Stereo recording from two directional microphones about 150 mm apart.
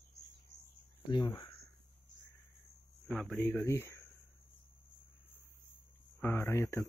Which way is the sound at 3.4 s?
15° left (ahead or behind).